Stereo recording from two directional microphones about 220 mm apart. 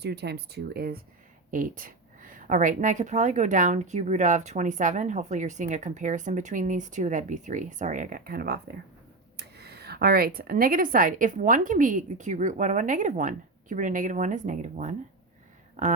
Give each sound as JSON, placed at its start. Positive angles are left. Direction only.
{"t": 0.0, "sound": "speech", "side_deg": -50}